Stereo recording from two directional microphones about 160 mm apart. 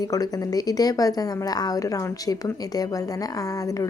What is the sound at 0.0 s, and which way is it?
A woman's voice, 20° left (ahead or behind).